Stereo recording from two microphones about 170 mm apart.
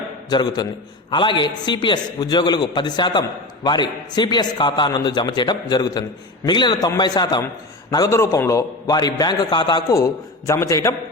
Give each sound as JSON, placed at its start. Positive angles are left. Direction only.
{"t": 0.3, "sound": "a man's voice", "side_deg": 25}